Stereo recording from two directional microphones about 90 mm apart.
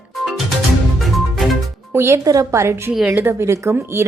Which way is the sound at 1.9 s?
30° right (ahead or behind).